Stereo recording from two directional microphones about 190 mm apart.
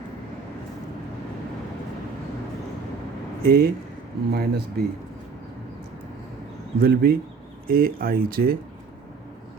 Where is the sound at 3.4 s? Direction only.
50° right (ahead or behind).